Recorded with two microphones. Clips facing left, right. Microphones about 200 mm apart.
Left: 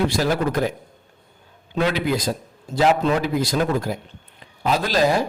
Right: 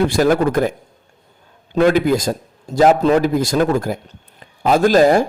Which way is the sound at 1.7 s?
50° right (ahead or behind).